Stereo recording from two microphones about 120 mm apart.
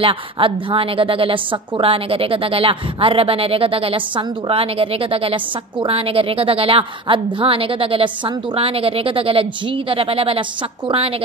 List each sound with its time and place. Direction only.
0.0 s a woman's voice: 50° right (ahead or behind)